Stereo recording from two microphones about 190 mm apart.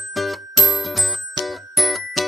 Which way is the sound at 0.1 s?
Centre (ahead or behind).